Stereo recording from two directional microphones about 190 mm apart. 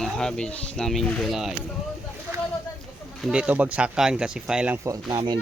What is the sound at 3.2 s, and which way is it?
A child's voice, centre (ahead or behind).